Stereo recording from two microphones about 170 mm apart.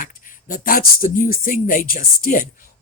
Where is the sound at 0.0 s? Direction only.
55° left (ahead or behind).